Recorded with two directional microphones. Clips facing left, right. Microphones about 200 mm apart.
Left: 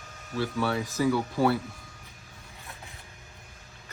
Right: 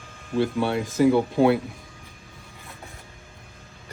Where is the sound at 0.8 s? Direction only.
50° right (ahead or behind).